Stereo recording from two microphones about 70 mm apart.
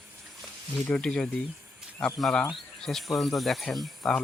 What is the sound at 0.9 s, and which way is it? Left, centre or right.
Speech, centre.